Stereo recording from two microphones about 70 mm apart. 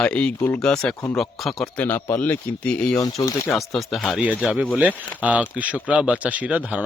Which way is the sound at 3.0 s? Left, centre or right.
Left.